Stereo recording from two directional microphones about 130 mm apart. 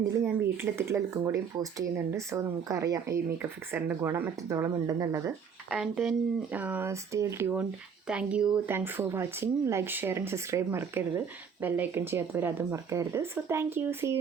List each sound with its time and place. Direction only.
0.3 s speech: 15° right (ahead or behind)
3.3 s speech: 15° right (ahead or behind)
5.7 s speech: 5° right (ahead or behind)
8.7 s speech: 15° right (ahead or behind)